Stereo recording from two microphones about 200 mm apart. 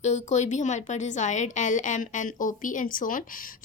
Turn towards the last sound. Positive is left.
turn(degrees=45)  # may be behind; listen again after turning